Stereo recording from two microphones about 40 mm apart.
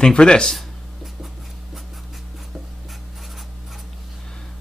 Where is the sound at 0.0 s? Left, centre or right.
Left.